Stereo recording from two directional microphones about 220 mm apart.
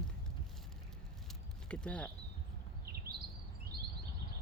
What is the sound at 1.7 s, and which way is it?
Speech, 5° left (ahead or behind).